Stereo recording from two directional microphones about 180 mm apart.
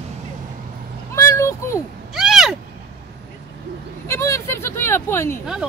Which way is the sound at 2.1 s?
Centre (ahead or behind).